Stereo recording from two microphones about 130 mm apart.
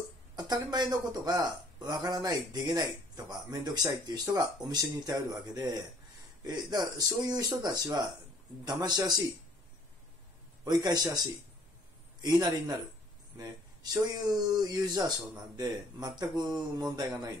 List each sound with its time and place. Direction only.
0.4 s speech: 30° right (ahead or behind)
10.6 s speech: 30° right (ahead or behind)
12.2 s speech: 30° right (ahead or behind)